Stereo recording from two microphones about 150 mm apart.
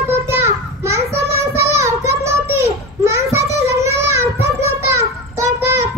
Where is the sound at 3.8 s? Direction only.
20° right (ahead or behind).